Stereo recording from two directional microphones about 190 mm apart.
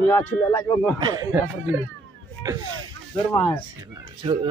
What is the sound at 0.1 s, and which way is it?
Speech, 15° left (ahead or behind).